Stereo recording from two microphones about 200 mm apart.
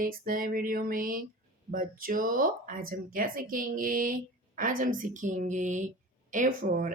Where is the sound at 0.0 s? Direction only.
45° right (ahead or behind).